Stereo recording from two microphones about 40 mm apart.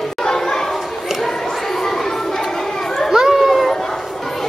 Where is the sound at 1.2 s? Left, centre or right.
Centre.